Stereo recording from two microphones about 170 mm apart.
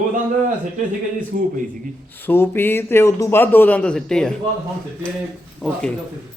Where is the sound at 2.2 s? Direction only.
15° left (ahead or behind).